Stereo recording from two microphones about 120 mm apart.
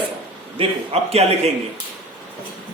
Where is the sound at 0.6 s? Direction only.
60° right (ahead or behind).